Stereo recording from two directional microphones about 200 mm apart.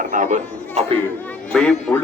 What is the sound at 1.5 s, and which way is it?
Speech, 5° left (ahead or behind).